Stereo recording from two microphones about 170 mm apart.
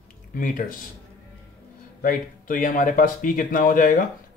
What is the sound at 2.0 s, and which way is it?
Speech, 55° left (ahead or behind).